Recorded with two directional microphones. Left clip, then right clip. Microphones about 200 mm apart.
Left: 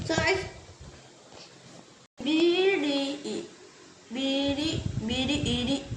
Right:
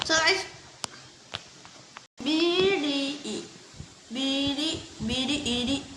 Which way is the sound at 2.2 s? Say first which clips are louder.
Even; 30° right (ahead or behind).